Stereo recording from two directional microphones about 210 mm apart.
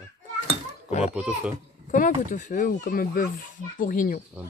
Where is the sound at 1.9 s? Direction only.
35° left (ahead or behind).